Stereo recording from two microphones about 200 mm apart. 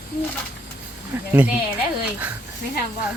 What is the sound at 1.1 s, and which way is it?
Speech, 10° right (ahead or behind).